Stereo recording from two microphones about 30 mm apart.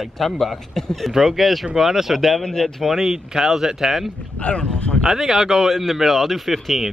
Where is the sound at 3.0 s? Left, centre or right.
Centre.